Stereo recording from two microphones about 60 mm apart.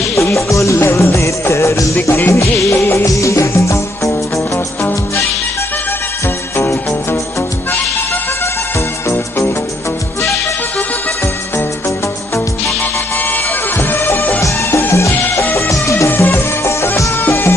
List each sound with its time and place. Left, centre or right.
0.1 s music: left
0.8 s music of bollywood: left
2.0 s music: left
2.8 s music: left
3.1 s music: left
6.5 s music: left
13.3 s music: left
14.4 s music: left
15.2 s music: left
15.7 s music: left
16.1 s music: left